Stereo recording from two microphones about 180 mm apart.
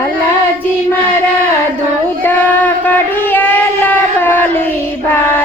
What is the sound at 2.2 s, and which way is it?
Child singing, 10° left (ahead or behind).